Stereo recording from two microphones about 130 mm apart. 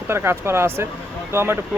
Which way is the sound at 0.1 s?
20° right (ahead or behind).